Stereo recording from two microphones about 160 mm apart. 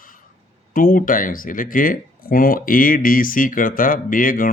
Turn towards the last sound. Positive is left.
turn(degrees=60)  # may be behind; listen again after turning